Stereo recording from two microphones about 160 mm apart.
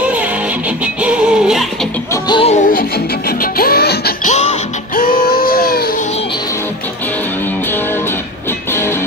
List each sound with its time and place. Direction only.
0.0 s music: 10° right (ahead or behind)
2.2 s music: 30° left (ahead or behind)
2.5 s music: 60° left (ahead or behind); by 4.1 s 85° left
4.2 s music: 45° left (ahead or behind)
4.9 s a sound: 65° left (ahead or behind)